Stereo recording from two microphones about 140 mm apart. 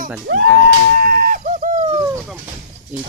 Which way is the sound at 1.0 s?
90° right.